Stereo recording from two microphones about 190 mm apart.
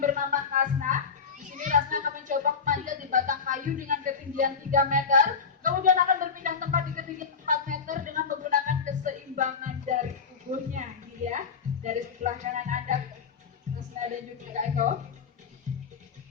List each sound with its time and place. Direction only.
0.0 s children playing: 45° right (ahead or behind)
11.3 s music: 40° right (ahead or behind)
14.5 s a sound: 40° right (ahead or behind)